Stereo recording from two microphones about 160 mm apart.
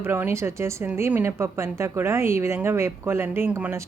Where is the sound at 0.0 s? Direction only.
15° right (ahead or behind).